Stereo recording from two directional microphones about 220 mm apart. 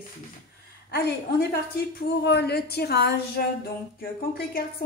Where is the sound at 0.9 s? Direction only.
45° left (ahead or behind).